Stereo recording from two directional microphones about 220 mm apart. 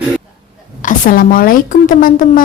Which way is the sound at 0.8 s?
40° left (ahead or behind).